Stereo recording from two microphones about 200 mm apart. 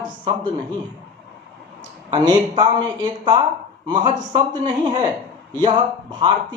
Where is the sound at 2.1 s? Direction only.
20° right (ahead or behind).